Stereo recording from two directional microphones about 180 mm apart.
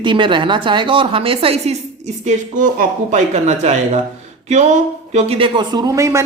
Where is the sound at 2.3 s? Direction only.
45° right (ahead or behind).